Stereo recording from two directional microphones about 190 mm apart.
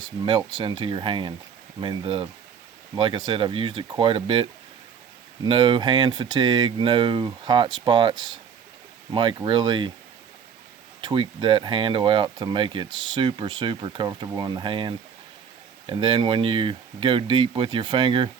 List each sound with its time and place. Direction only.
0.0 s speech: 25° right (ahead or behind)
5.5 s speech: 25° right (ahead or behind)
11.0 s speech: 25° right (ahead or behind)